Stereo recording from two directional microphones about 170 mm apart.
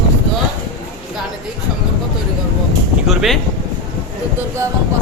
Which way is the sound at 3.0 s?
Centre (ahead or behind).